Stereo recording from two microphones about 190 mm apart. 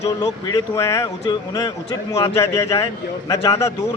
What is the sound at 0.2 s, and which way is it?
A man's voice, 20° left (ahead or behind).